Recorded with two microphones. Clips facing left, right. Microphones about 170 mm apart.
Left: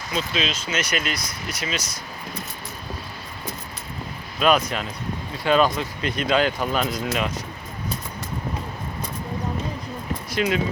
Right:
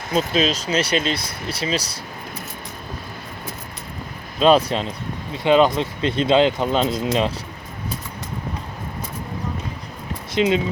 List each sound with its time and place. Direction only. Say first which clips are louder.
0.1 s speech: right 7 dB; 40° right (ahead or behind)
4.4 s speech: right 5 dB; 30° right (ahead or behind)
10.3 s speech: right 5 dB; 20° right (ahead or behind)